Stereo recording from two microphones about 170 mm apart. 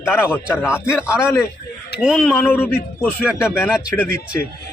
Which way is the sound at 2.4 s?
10° left (ahead or behind).